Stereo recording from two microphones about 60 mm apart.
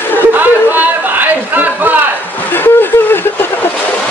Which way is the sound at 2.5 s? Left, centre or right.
Left.